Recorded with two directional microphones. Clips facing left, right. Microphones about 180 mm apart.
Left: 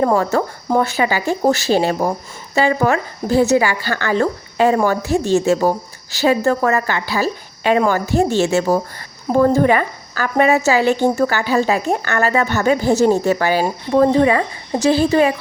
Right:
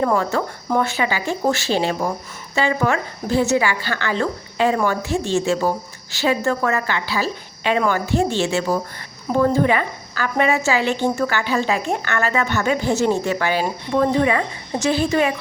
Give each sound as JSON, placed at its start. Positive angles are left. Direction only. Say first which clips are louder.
{"t": 0.0, "sound": "a woman's voice", "louder": "left 4 dB", "side_deg": 35}